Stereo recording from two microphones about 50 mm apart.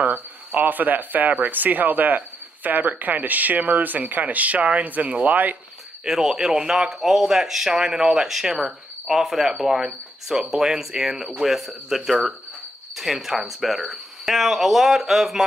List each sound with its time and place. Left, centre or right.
0.0 s speech: right
6.0 s speech: centre